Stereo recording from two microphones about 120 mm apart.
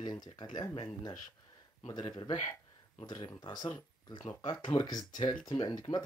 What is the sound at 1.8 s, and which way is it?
Speech, 40° left (ahead or behind).